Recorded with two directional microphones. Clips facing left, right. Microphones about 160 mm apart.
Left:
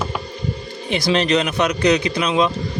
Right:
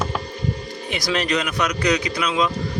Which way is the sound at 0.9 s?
25° left (ahead or behind).